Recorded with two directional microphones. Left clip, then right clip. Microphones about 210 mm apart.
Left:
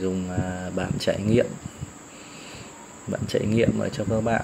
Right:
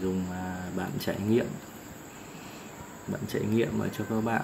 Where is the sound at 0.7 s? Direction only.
15° left (ahead or behind).